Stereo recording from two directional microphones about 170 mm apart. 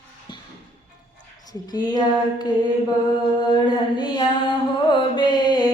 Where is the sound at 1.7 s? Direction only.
25° left (ahead or behind).